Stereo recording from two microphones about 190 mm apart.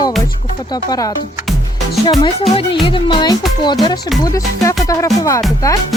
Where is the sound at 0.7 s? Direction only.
20° left (ahead or behind).